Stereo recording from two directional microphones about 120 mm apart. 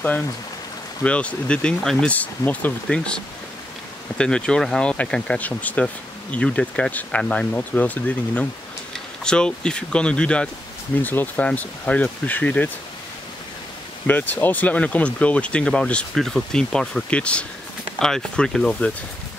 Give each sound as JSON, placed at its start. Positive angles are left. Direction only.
{"t": 1.0, "sound": "speech", "side_deg": 10}
{"t": 4.2, "sound": "speech", "side_deg": 5}
{"t": 14.0, "sound": "speech", "side_deg": 15}